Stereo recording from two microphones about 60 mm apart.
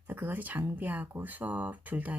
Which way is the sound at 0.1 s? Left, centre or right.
Right.